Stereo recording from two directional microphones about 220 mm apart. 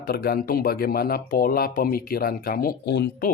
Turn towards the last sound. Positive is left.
turn(degrees=50)  # may be behind; listen again after turning